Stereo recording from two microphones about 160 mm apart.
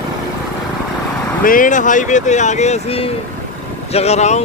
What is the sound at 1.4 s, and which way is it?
Speech, 55° left (ahead or behind).